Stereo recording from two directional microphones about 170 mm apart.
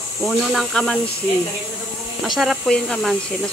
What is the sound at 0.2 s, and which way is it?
Speech, centre (ahead or behind).